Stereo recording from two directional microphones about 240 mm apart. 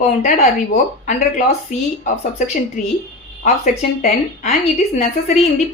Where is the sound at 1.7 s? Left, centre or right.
Left.